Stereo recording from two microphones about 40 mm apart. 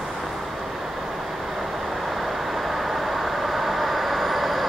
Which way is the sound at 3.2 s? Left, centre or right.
Centre.